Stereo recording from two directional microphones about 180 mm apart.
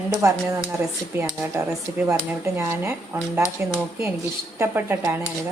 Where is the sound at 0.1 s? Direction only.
20° right (ahead or behind).